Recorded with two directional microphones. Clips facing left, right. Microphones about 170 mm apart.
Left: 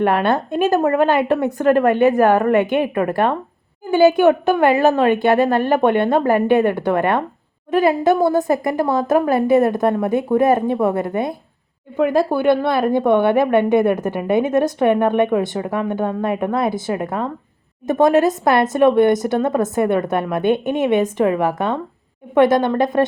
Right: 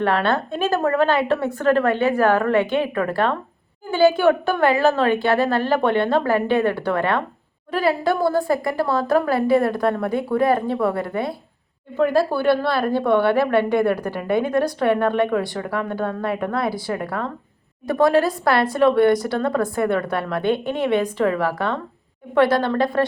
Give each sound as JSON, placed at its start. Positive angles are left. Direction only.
{"t": 0.0, "sound": "a woman's voice", "side_deg": 15}